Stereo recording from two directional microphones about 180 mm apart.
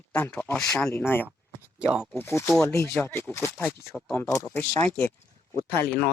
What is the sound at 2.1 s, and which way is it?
Speech, 10° left (ahead or behind).